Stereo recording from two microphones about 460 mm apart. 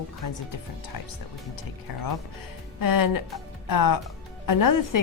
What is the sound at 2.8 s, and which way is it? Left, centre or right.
Speech, left.